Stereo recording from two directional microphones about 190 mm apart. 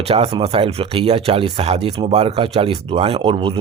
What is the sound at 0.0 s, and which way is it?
Speech, 30° right (ahead or behind).